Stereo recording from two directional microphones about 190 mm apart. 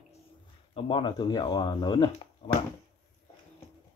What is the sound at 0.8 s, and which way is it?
Speech, 25° left (ahead or behind).